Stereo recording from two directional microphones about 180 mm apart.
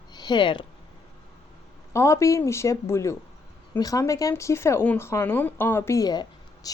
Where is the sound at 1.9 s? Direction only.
15° left (ahead or behind).